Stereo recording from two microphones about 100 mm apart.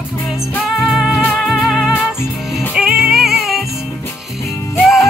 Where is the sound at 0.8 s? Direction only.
5° right (ahead or behind).